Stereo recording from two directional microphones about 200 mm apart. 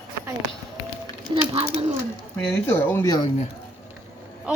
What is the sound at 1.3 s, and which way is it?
Speech, 25° right (ahead or behind).